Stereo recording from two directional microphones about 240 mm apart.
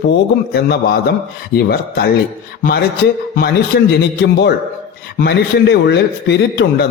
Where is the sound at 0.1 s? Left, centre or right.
Left.